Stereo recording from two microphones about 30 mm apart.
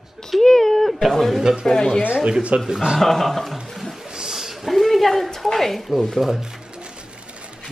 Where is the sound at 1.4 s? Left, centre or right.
Centre.